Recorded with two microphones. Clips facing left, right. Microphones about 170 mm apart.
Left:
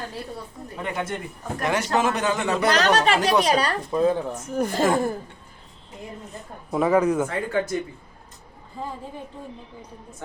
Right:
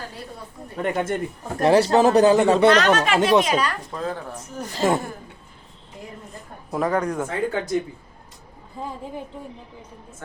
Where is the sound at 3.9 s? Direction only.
15° left (ahead or behind).